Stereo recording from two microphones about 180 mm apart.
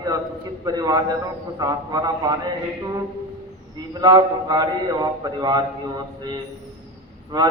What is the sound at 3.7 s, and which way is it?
A man's voice, 20° right (ahead or behind).